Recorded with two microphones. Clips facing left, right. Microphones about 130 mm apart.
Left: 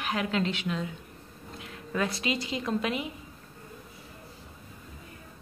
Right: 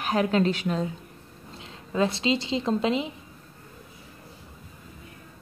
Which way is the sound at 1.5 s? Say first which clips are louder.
Right 3 dB; 25° right (ahead or behind).